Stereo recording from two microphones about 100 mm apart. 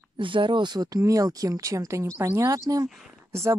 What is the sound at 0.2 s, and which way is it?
Speech, 55° right (ahead or behind).